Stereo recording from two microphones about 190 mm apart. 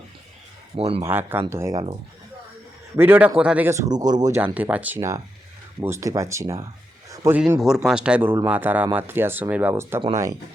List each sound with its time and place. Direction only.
0.8 s speech: 30° right (ahead or behind)
1.0 s speech: 10° right (ahead or behind)
2.9 s speech: 10° right (ahead or behind)
4.4 s speech: 10° right (ahead or behind)